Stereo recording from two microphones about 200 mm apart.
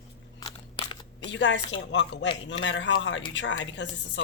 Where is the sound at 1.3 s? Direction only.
65° left (ahead or behind).